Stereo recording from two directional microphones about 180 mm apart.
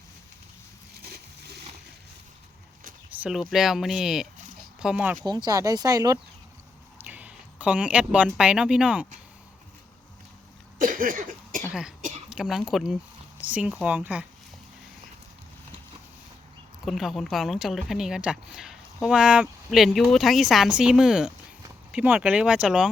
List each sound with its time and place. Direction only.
1.0 s a sound: 65° right (ahead or behind)
3.1 s speech: 5° right (ahead or behind)
5.2 s speech: 25° right (ahead or behind)
7.0 s speech: 10° right (ahead or behind)
10.8 s cough: 50° right (ahead or behind)
11.7 s cough: 5° right (ahead or behind)
12.3 s speech: 5° right (ahead or behind)
16.8 s speech: centre (ahead or behind)